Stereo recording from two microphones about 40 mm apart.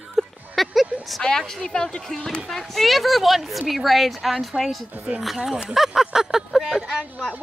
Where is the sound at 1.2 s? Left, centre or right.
Left.